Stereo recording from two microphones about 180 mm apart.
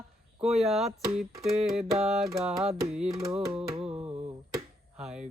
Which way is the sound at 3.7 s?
30° right (ahead or behind).